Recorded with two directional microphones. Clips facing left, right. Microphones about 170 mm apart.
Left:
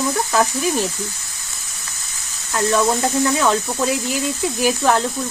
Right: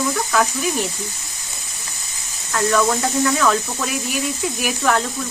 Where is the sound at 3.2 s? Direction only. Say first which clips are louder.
Right 1 dB; 25° left (ahead or behind).